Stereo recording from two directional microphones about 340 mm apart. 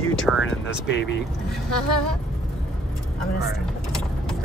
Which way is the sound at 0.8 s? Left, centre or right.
Left.